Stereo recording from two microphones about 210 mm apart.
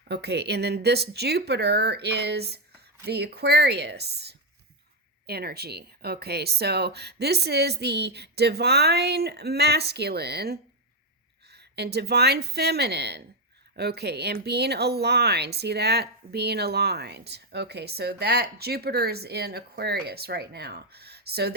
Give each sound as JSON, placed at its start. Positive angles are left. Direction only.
{"t": 0.1, "sound": "speech", "side_deg": -50}